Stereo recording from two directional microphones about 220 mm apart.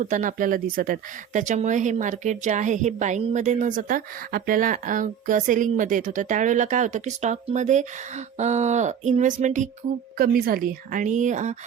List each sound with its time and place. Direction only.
0.0 s speech: 35° right (ahead or behind)